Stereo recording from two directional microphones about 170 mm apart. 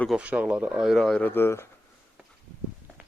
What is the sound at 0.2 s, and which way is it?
A man's voice, 10° right (ahead or behind).